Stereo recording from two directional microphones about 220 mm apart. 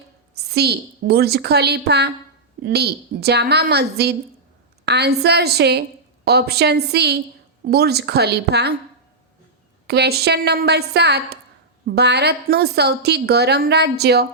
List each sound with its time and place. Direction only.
0.3 s a woman's voice: 45° right (ahead or behind)
9.8 s a woman's voice: 45° right (ahead or behind)